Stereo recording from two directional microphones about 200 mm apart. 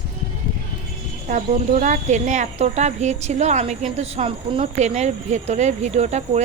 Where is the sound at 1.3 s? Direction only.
40° right (ahead or behind).